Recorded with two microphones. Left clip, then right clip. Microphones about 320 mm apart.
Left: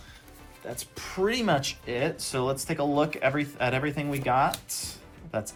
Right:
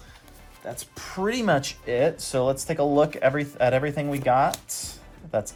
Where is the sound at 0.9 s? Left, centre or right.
Right.